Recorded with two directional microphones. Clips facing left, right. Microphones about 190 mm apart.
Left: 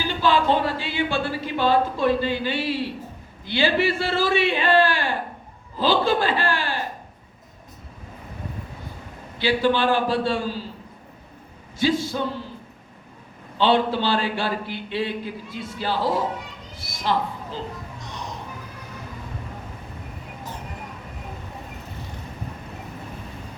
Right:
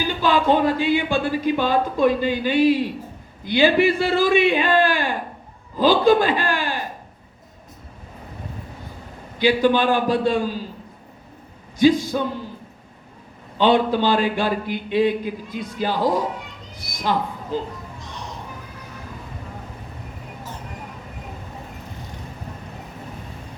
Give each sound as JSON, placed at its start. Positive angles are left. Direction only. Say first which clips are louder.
{"t": 0.2, "sound": "a sound", "louder": "right 2 dB", "side_deg": -15}
{"t": 0.9, "sound": "a man's voice", "louder": "right 3 dB", "side_deg": -15}
{"t": 9.4, "sound": "speech", "louder": "right 3 dB", "side_deg": -15}
{"t": 11.8, "sound": "speech", "louder": "right 6 dB", "side_deg": -15}
{"t": 13.6, "sound": "speech", "louder": "right 3 dB", "side_deg": -15}
{"t": 16.7, "sound": "a sound", "louder": "right 3 dB", "side_deg": -15}